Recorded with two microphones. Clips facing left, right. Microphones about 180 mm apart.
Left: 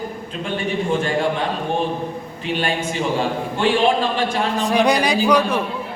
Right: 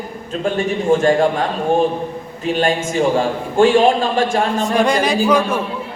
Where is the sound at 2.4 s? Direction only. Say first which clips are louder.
Right 5 dB; 45° right (ahead or behind).